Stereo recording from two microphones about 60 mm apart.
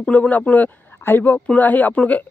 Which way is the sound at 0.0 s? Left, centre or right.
Left.